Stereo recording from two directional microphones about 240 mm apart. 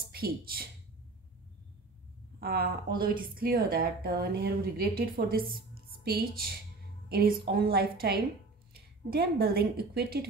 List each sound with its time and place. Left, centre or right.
0.1 s speech: right
2.4 s a woman's voice: right